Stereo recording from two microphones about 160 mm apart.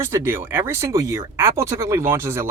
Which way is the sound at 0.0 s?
15° right (ahead or behind).